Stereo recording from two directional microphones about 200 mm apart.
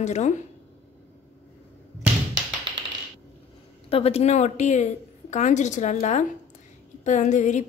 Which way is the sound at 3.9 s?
30° left (ahead or behind).